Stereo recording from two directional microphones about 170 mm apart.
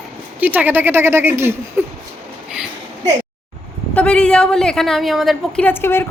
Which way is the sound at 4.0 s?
5° left (ahead or behind).